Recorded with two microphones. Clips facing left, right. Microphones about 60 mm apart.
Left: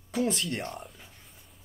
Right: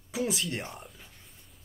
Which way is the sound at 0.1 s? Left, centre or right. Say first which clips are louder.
Left 2 dB; centre.